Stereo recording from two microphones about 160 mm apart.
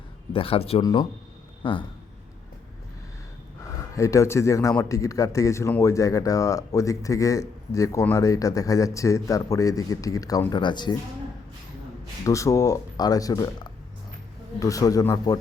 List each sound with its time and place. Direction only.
0.3 s speech: 35° left (ahead or behind)
0.8 s speech: 25° left (ahead or behind)
3.9 s speech: 20° left (ahead or behind)
12.2 s speech: 20° left (ahead or behind)